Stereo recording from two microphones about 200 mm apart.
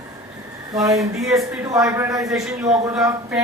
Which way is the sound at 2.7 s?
5° right (ahead or behind).